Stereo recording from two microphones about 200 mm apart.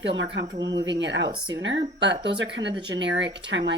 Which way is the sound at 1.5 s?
65° right (ahead or behind).